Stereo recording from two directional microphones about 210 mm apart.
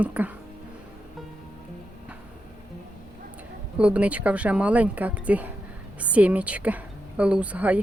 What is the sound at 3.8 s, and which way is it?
Speech, 5° right (ahead or behind).